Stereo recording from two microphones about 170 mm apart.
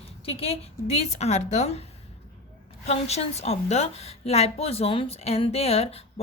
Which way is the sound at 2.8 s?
40° left (ahead or behind).